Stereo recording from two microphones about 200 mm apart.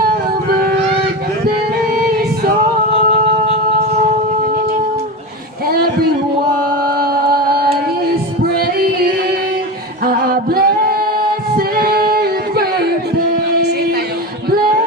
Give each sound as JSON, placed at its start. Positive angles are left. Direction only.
{"t": 5.6, "sound": "a sound", "side_deg": -50}
{"t": 7.0, "sound": "music", "side_deg": -50}
{"t": 10.0, "sound": "music", "side_deg": -50}
{"t": 11.5, "sound": "singing", "side_deg": -50}